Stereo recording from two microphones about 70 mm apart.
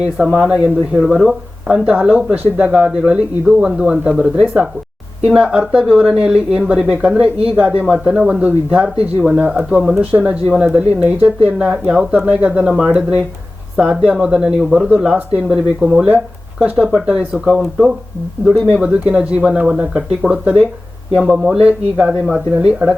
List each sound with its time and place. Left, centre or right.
0.0 s speech: centre
11.7 s speech: centre
18.7 s speech: centre